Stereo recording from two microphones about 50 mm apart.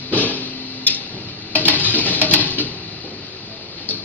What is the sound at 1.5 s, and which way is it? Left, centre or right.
Stir, left.